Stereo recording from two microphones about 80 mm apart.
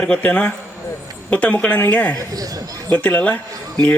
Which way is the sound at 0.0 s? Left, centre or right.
Centre.